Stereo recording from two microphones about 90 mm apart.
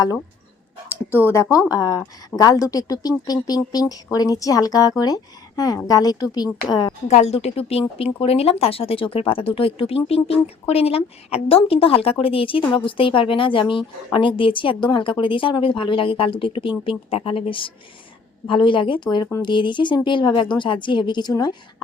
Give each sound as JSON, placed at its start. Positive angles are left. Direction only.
{"t": 1.1, "sound": "speech", "side_deg": 30}
{"t": 7.3, "sound": "a woman's voice", "side_deg": 90}
{"t": 18.4, "sound": "a woman's voice", "side_deg": 70}